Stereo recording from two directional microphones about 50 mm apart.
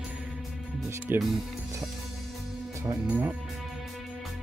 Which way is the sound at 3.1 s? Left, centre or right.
Right.